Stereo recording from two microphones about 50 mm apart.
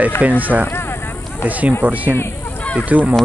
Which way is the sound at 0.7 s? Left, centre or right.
Left.